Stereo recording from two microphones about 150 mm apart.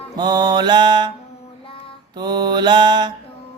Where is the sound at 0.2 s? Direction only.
25° right (ahead or behind).